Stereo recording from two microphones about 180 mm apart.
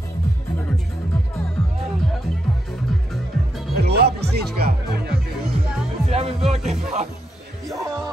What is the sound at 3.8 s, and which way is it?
Music, 65° right (ahead or behind).